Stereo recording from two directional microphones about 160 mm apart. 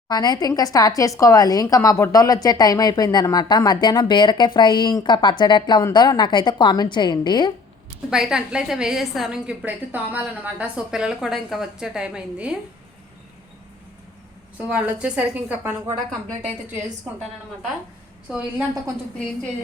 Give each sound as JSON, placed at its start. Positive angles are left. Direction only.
{"t": 0.1, "sound": "speech", "side_deg": 25}
{"t": 8.1, "sound": "a woman's voice", "side_deg": -5}
{"t": 14.7, "sound": "a woman's voice", "side_deg": -5}
{"t": 18.3, "sound": "a woman's voice", "side_deg": -10}